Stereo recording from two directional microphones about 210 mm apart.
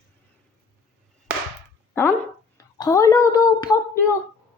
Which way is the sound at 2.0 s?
10° left (ahead or behind).